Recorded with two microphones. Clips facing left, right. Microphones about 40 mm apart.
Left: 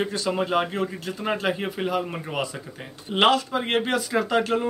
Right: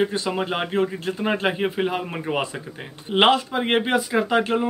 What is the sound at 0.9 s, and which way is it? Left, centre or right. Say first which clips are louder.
A man's voice: right 3 dB; right.